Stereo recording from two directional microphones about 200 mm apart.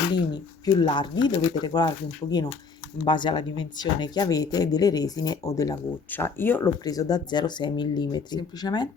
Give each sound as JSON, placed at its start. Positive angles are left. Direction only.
{"t": 0.1, "sound": "speech", "side_deg": 20}
{"t": 3.0, "sound": "speech", "side_deg": 25}